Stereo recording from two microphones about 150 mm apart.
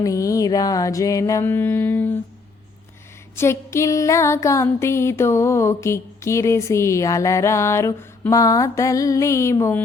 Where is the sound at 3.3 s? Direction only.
15° left (ahead or behind).